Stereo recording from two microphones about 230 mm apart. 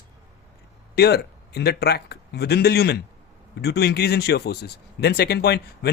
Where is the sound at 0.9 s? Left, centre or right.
Left.